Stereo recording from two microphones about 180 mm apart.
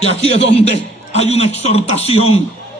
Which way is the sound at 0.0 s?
35° left (ahead or behind).